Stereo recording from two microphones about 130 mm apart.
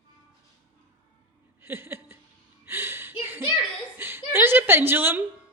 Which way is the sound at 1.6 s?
15° right (ahead or behind).